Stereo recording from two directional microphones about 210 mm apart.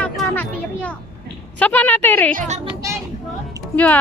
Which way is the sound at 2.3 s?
35° right (ahead or behind).